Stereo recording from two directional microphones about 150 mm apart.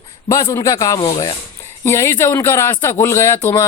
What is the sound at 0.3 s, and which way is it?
Speech, 20° left (ahead or behind).